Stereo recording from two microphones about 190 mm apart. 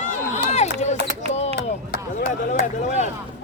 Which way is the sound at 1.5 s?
50° left (ahead or behind).